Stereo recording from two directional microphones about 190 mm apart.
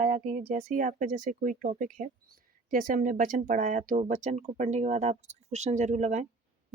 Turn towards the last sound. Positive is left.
turn(degrees=-40)  # may be behind; listen again after turning